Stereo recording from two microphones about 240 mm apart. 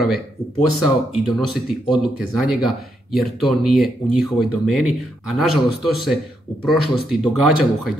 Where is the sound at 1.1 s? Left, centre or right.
Centre.